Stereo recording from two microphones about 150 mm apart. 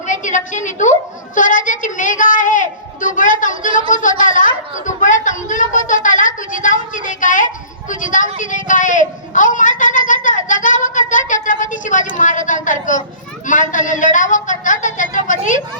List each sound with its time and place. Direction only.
0.1 s a woman's voice: 55° left (ahead or behind)